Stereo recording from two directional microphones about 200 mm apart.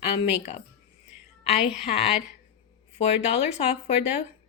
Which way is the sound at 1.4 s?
30° left (ahead or behind).